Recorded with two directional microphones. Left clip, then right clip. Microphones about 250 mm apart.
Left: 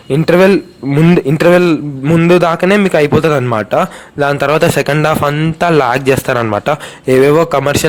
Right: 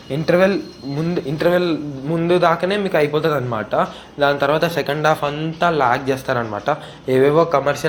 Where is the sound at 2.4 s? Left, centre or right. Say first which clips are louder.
Left 6 dB; left.